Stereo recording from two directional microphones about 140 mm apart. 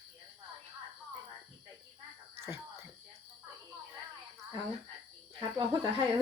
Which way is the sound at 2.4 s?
20° right (ahead or behind).